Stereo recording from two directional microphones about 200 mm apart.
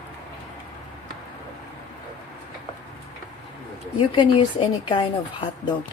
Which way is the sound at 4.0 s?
25° left (ahead or behind).